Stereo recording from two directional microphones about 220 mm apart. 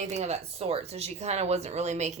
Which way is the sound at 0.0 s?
30° right (ahead or behind).